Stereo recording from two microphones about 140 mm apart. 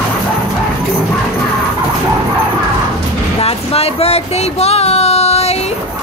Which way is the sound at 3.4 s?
45° left (ahead or behind).